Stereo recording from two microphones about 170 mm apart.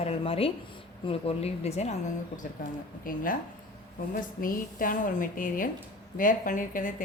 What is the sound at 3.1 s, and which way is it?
Speech, 55° left (ahead or behind).